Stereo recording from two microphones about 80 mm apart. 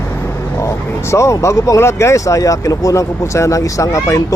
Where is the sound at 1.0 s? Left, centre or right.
Left.